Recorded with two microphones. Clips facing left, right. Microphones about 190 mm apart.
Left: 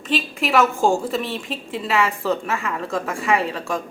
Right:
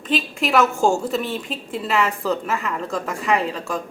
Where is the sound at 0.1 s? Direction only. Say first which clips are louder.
Even; centre (ahead or behind).